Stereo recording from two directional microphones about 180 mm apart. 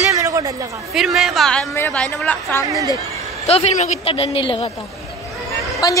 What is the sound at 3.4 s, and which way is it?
Speech, 35° left (ahead or behind).